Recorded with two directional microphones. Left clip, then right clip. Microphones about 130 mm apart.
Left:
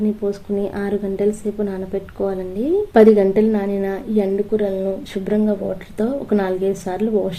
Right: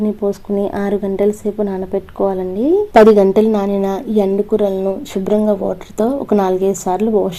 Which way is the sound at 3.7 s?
55° right (ahead or behind).